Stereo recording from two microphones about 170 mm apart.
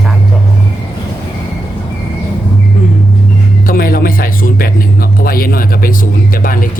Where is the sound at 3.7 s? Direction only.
60° left (ahead or behind).